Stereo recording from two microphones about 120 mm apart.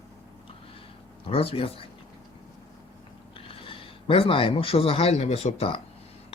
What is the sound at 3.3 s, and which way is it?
Speech, 50° left (ahead or behind).